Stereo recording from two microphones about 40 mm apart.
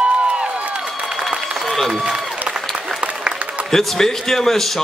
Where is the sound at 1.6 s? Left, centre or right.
Centre.